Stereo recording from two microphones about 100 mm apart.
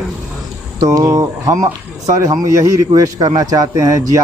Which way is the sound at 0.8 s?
35° right (ahead or behind).